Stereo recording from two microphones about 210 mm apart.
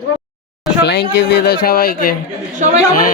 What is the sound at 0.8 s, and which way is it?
A woman's voice, 50° left (ahead or behind).